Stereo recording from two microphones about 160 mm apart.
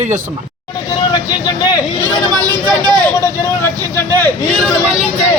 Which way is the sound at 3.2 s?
15° left (ahead or behind).